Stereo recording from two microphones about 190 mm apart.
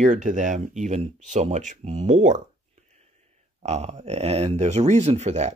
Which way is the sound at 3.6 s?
35° right (ahead or behind).